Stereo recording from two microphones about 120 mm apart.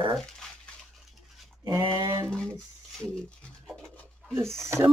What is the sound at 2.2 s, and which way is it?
Speech, 10° left (ahead or behind).